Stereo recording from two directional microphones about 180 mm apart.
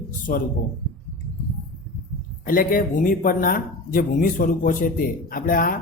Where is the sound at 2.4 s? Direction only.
50° left (ahead or behind).